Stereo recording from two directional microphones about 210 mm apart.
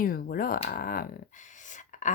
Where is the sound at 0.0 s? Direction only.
45° left (ahead or behind).